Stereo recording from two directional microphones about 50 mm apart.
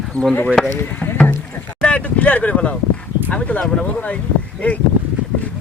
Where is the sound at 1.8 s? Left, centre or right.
Left.